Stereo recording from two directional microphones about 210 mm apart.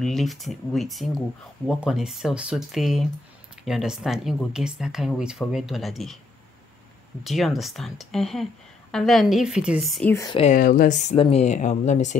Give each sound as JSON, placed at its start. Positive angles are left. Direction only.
{"t": 0.0, "sound": "speech", "side_deg": 0}
{"t": 7.2, "sound": "speech", "side_deg": 0}
{"t": 10.1, "sound": "speech", "side_deg": 20}
{"t": 10.4, "sound": "speech", "side_deg": 40}